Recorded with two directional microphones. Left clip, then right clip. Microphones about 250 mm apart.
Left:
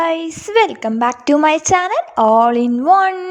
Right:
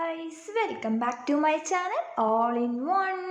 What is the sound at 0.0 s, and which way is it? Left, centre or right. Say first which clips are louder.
A woman's voice: left 15 dB; left.